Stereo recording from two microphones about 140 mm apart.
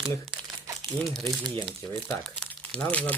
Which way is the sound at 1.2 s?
35° right (ahead or behind).